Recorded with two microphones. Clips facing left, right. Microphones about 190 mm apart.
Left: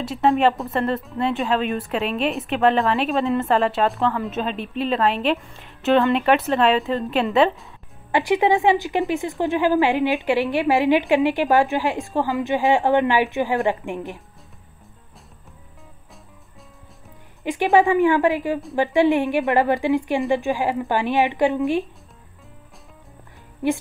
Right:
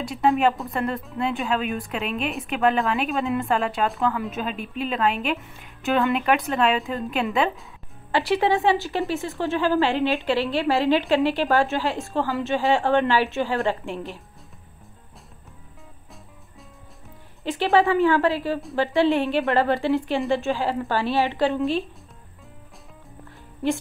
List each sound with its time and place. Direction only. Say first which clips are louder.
0.0 s speech: left 2 dB; centre (ahead or behind)
8.1 s a woman's voice: left 3 dB; 15° left (ahead or behind)
17.4 s a woman's voice: left 3 dB; 15° left (ahead or behind)